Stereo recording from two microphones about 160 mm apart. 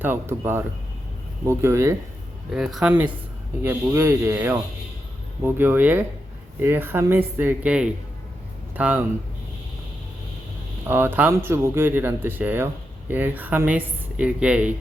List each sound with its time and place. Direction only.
0.0 s speech: 15° right (ahead or behind)
2.5 s speech: centre (ahead or behind)
10.8 s speech: 10° right (ahead or behind)